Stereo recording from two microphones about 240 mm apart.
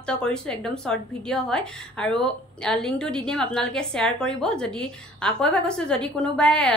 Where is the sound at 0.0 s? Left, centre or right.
Centre.